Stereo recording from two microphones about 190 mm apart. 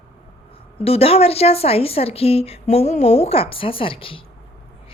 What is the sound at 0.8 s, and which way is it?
A woman's voice, 30° left (ahead or behind).